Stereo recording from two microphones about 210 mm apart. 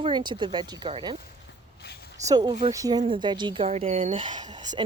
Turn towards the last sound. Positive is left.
turn(degrees=-20)  # may be behind; listen again after turning